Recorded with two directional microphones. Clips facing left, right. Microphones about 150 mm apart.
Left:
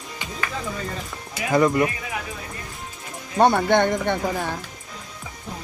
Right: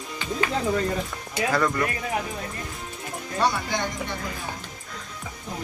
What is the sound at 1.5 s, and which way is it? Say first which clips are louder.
Speech: left 6 dB; 20° left (ahead or behind).